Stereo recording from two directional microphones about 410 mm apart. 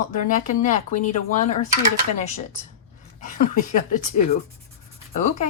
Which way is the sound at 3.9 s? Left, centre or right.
Centre.